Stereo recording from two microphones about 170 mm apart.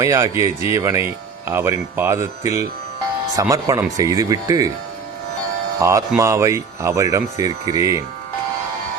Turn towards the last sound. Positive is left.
turn(degrees=-20)  # may be behind; listen again after turning